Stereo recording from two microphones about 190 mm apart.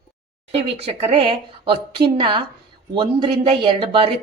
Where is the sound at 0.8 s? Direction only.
30° right (ahead or behind).